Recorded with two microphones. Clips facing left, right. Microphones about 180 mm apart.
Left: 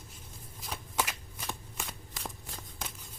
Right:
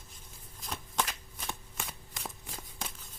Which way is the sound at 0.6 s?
10° left (ahead or behind).